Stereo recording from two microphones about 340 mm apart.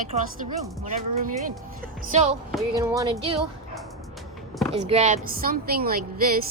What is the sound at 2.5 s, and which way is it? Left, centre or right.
Speech, centre.